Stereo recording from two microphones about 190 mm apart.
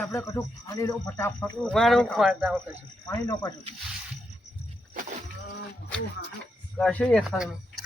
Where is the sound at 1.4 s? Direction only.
Centre (ahead or behind).